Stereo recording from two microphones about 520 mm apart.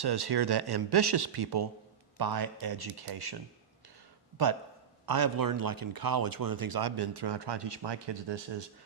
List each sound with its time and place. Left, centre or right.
0.0 s a man's voice: right
4.4 s a man's voice: right